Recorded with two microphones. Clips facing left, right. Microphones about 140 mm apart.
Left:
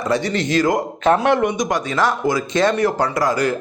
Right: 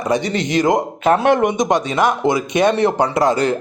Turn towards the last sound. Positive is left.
turn(degrees=-25)  # may be behind; listen again after turning